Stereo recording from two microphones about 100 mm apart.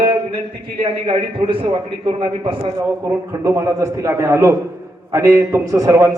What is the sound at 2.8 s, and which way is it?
A man's voice, 30° right (ahead or behind).